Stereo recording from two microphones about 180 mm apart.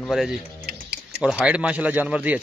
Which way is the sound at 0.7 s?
55° right (ahead or behind).